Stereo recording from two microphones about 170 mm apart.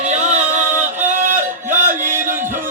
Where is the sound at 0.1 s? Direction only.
40° right (ahead or behind).